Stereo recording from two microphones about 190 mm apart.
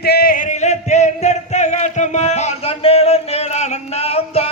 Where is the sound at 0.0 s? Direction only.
55° left (ahead or behind).